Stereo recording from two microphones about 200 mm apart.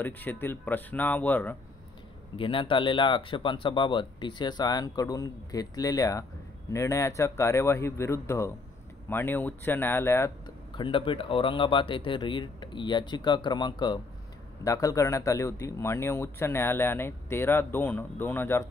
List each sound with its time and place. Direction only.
0.0 s speech: 10° left (ahead or behind)
2.3 s speech: 25° left (ahead or behind)
10.7 s speech: 25° left (ahead or behind)